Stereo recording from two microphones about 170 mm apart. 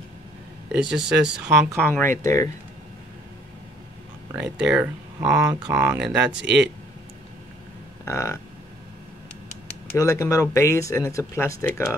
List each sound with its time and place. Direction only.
0.8 s speech: 5° right (ahead or behind)
1.5 s speech: 15° right (ahead or behind)
1.8 s speech: 10° left (ahead or behind)
4.3 s speech: 5° right (ahead or behind)
5.2 s speech: 20° right (ahead or behind)
6.0 s speech: 90° right
8.0 s a sound: 15° left (ahead or behind)
9.9 s speech: 20° left (ahead or behind)